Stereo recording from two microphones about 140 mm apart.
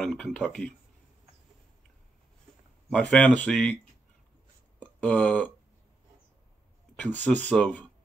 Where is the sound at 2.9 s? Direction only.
5° left (ahead or behind).